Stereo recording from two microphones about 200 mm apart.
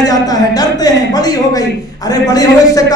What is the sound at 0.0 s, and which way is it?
A man's voice, 20° left (ahead or behind).